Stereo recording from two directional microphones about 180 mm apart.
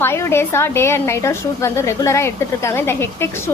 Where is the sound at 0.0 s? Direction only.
15° left (ahead or behind).